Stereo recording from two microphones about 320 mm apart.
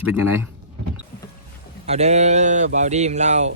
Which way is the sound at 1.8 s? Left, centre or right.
Centre.